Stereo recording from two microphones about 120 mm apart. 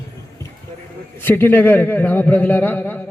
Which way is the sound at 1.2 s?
15° left (ahead or behind).